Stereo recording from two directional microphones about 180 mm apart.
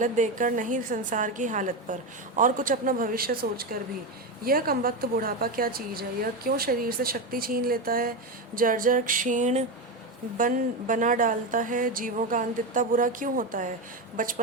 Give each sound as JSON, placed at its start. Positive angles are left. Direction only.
{"t": 0.0, "sound": "a woman's voice", "side_deg": -45}